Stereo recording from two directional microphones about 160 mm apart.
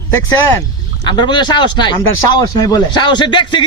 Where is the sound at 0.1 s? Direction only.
20° left (ahead or behind).